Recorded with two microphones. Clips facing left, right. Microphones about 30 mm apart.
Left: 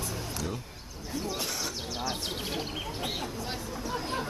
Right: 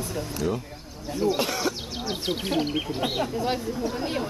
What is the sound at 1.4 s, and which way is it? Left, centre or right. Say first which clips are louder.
Speech: right 8 dB; right.